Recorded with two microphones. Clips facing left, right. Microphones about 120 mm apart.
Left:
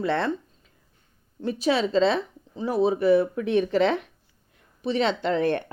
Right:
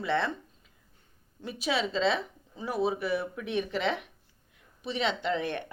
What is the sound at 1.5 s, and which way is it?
Speech, 35° left (ahead or behind).